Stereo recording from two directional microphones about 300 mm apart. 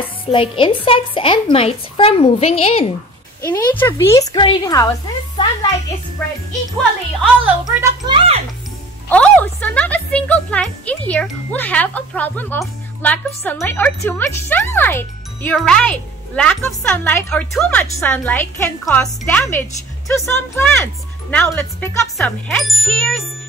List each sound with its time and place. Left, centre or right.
0.3 s a woman's voice: centre
3.4 s a woman's voice: centre
7.4 s a child's voice: centre
9.1 s a woman's voice: centre